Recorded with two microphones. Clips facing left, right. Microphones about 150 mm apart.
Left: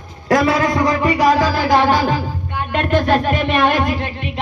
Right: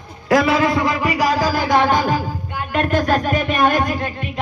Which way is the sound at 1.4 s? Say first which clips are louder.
Left 2 dB; 45° right (ahead or behind).